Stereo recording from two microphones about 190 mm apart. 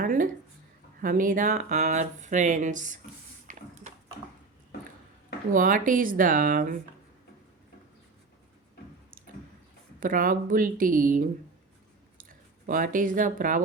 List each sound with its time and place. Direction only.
0.0 s a sound: 45° right (ahead or behind)
1.0 s speech: 45° right (ahead or behind)
3.4 s a sound: 40° right (ahead or behind)
5.5 s speech: 45° right (ahead or behind)
10.0 s speech: 45° right (ahead or behind)
12.6 s speech: 45° right (ahead or behind)